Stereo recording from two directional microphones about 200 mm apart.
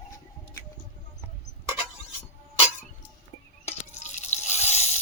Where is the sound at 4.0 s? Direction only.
35° left (ahead or behind).